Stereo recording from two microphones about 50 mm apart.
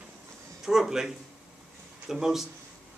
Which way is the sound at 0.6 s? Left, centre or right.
Centre.